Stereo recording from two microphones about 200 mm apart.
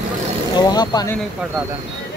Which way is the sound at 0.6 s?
20° left (ahead or behind).